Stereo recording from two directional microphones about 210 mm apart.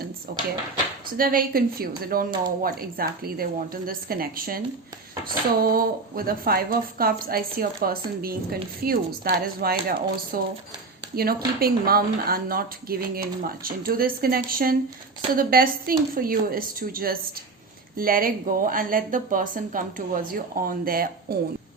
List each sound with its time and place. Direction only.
0.3 s speech: 45° right (ahead or behind)
5.6 s a woman's voice: 45° right (ahead or behind)